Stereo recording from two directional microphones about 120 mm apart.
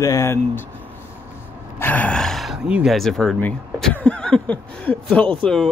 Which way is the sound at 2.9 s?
Centre (ahead or behind).